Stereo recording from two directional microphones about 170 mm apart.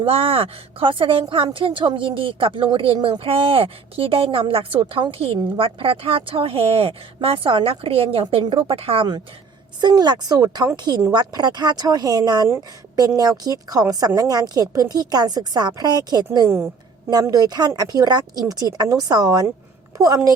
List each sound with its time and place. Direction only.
0.0 s a woman's voice: 35° right (ahead or behind)